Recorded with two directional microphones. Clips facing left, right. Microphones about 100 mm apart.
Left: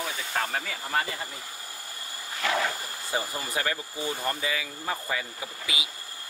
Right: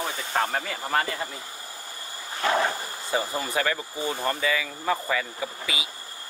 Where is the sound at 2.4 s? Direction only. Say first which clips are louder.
Right 4 dB; 40° right (ahead or behind).